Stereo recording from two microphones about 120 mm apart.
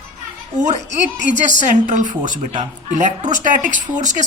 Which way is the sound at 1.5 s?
90° right.